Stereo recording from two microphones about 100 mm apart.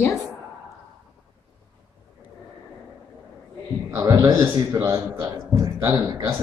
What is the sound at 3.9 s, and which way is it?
A man's voice, 30° right (ahead or behind).